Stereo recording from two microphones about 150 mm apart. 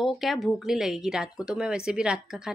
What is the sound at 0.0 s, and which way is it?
Speech, centre (ahead or behind).